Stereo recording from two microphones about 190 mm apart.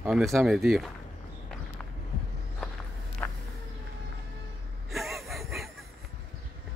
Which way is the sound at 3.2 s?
5° left (ahead or behind).